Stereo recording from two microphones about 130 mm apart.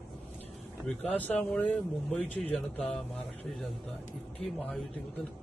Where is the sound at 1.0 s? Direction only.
10° left (ahead or behind).